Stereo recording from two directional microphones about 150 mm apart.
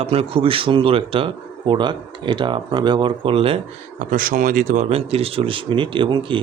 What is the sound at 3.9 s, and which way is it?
Speech, 70° right (ahead or behind).